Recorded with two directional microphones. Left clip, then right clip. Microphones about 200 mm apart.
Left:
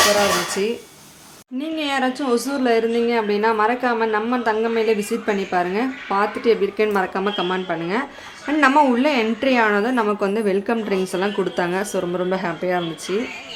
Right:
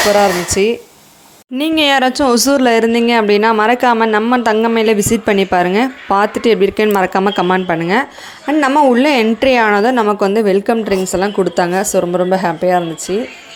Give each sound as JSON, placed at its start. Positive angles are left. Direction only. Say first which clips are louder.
{"t": 0.6, "sound": "speech", "louder": "right 9 dB", "side_deg": -30}
{"t": 1.5, "sound": "speech", "louder": "right 11 dB", "side_deg": -50}
{"t": 8.4, "sound": "a woman's voice", "louder": "right 4 dB", "side_deg": -25}
{"t": 9.0, "sound": "a woman's voice", "louder": "right 7 dB", "side_deg": -35}